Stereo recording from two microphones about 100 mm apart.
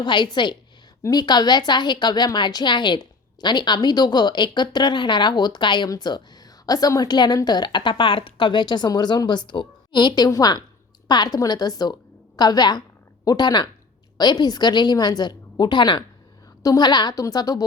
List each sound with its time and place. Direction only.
0.0 s a woman's voice: 50° left (ahead or behind)